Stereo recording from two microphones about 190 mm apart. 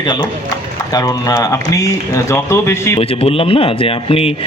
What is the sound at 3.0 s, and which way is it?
A man's voice, 30° left (ahead or behind).